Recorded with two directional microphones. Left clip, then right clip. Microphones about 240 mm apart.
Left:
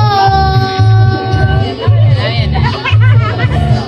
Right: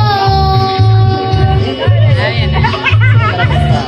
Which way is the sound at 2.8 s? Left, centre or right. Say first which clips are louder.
Right 3 dB; right.